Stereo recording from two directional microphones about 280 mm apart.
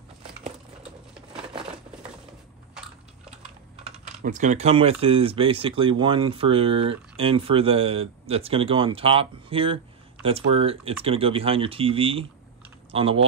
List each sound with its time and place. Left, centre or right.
2.7 s crushing: centre
3.8 s speech: right